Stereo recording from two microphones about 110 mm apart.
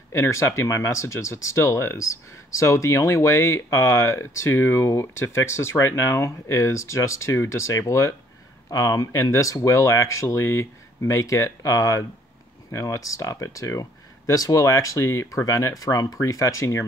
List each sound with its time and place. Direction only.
0.1 s speech: 25° left (ahead or behind)